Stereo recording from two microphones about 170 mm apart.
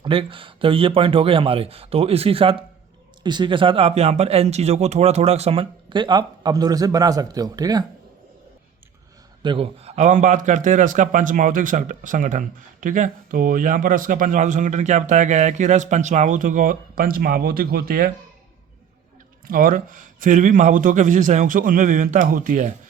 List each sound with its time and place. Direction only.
0.0 s speech: 30° right (ahead or behind)
9.4 s a man's voice: 30° right (ahead or behind); by 18.1 s 60° right (ahead or behind)
19.5 s a man's voice: 55° right (ahead or behind)